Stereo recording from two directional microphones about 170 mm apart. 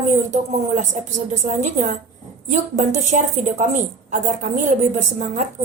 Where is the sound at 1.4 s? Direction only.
45° right (ahead or behind).